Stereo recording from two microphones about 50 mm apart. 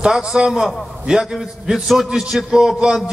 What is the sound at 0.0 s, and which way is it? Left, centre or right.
A man's voice, centre.